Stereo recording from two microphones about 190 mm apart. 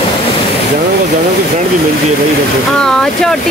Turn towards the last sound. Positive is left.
turn(degrees=5)  # may be behind; listen again after turning